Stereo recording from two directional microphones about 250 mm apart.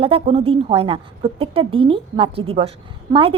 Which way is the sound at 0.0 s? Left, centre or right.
Right.